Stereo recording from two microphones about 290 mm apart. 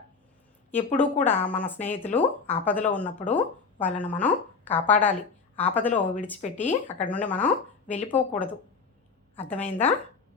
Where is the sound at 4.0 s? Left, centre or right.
Centre.